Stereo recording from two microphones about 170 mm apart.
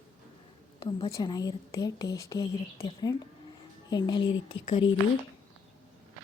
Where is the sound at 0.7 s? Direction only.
25° left (ahead or behind).